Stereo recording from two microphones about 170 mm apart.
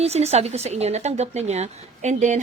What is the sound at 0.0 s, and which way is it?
Speech, 40° right (ahead or behind).